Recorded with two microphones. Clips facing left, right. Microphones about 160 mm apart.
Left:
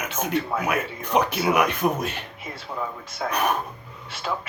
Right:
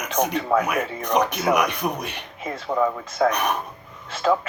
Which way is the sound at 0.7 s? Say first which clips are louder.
Right 2 dB; 5° left (ahead or behind).